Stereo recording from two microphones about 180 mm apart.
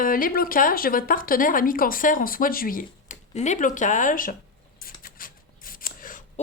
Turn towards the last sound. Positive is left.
turn(degrees=50)  # may be behind; listen again after turning